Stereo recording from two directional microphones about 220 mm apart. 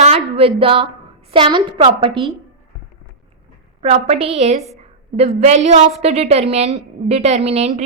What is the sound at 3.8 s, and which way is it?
A woman's voice, 30° right (ahead or behind).